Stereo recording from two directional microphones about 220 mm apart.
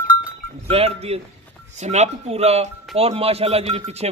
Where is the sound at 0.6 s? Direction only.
25° right (ahead or behind).